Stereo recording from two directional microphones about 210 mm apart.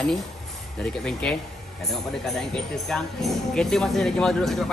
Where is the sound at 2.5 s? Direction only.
Centre (ahead or behind).